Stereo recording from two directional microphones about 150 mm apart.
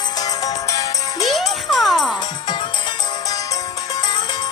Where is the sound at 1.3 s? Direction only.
Centre (ahead or behind).